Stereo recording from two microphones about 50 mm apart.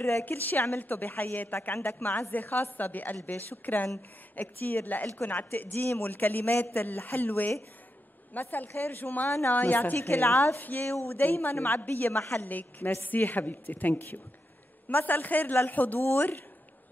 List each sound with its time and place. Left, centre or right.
0.2 s speech: left
9.9 s a woman's voice: left
11.2 s speech: left